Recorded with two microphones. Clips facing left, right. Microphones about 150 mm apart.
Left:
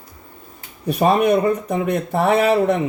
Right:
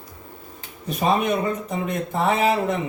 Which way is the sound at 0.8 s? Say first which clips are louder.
Left 5 dB; 60° left (ahead or behind).